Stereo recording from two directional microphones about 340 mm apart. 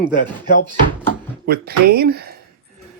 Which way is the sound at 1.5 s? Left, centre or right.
Right.